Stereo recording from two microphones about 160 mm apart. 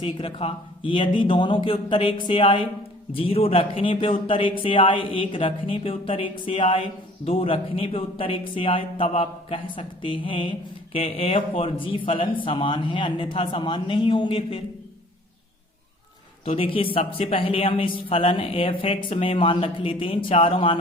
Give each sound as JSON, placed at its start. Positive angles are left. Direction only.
{"t": 0.0, "sound": "a man's voice", "side_deg": 35}
{"t": 16.4, "sound": "a man's voice", "side_deg": 35}